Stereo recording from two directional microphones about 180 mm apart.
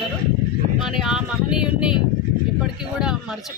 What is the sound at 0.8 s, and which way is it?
Vehicle, centre (ahead or behind).